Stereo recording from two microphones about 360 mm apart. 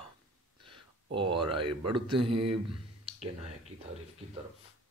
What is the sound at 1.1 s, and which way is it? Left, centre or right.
Speech, centre.